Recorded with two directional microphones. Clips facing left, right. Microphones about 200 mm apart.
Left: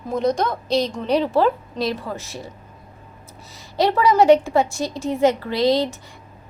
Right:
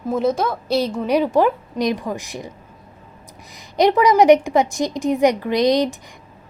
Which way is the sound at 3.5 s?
15° right (ahead or behind).